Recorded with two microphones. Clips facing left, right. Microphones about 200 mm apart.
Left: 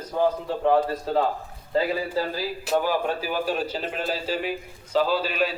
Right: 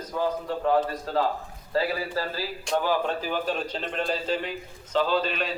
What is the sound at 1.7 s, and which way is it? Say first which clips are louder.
Speech: left 3 dB; 15° left (ahead or behind).